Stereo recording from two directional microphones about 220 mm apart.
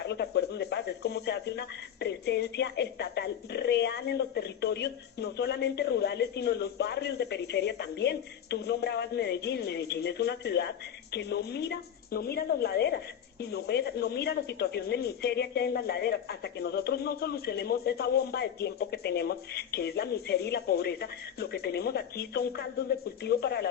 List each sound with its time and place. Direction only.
0.0 s speech: 50° left (ahead or behind)